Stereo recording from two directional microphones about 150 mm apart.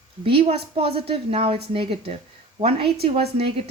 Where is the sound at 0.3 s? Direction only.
40° right (ahead or behind).